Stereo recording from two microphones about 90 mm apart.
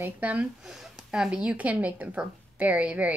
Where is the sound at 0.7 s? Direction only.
5° right (ahead or behind).